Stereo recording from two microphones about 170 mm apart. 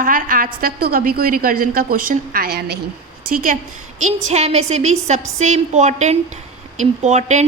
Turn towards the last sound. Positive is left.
turn(degrees=-45)  # may be behind; listen again after turning